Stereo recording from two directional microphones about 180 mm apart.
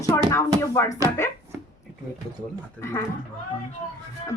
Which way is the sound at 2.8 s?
15° left (ahead or behind).